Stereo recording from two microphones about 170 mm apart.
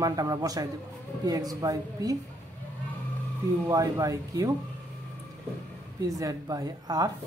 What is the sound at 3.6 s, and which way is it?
Speech, 20° right (ahead or behind).